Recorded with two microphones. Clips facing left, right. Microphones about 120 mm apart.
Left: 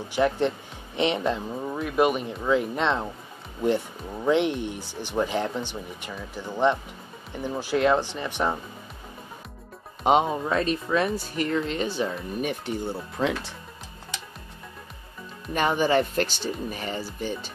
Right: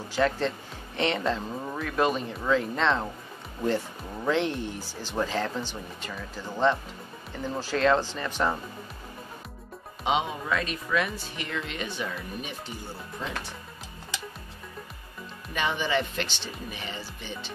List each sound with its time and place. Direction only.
0.1 s speech: 15° left (ahead or behind)
4.3 s speech: 15° left (ahead or behind)
10.0 s speech: 45° left (ahead or behind)
10.4 s speech: 35° left (ahead or behind)
12.4 s speech: 55° left (ahead or behind)
13.2 s speech: 90° left
15.5 s speech: 45° left (ahead or behind)